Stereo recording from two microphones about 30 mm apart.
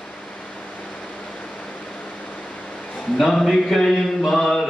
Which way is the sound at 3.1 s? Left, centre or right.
Centre.